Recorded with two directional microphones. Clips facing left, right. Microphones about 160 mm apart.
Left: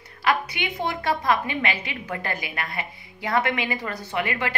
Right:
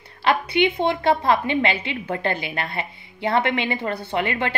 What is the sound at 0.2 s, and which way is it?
A woman's voice, 30° right (ahead or behind).